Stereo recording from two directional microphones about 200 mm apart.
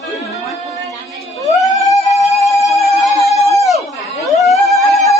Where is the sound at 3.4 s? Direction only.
15° left (ahead or behind).